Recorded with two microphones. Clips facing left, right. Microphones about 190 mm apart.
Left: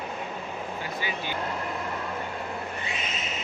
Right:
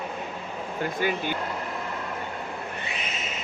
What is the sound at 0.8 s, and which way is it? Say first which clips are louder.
Speech: right 10 dB; 50° right (ahead or behind).